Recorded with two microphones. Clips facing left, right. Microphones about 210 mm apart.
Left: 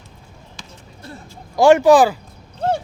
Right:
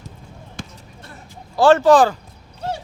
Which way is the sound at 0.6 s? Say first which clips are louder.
Right 9 dB; 55° right (ahead or behind).